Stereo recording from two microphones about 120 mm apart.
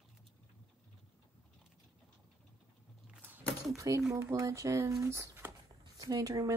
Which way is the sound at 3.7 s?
30° right (ahead or behind).